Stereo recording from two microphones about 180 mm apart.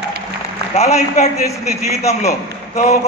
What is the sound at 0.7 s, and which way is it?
A man's voice, 40° left (ahead or behind).